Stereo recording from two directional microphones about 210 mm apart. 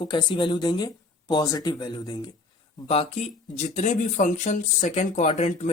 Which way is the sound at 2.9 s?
30° left (ahead or behind).